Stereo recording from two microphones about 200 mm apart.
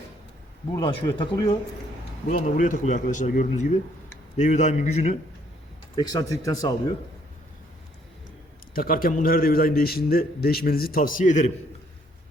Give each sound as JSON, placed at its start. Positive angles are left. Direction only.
{"t": 0.7, "sound": "speech", "side_deg": 20}
{"t": 2.3, "sound": "speech", "side_deg": 40}
{"t": 6.0, "sound": "speech", "side_deg": 20}
{"t": 8.7, "sound": "a man's voice", "side_deg": 45}